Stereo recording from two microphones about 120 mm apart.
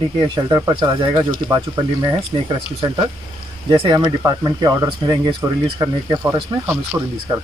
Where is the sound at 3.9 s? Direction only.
35° right (ahead or behind).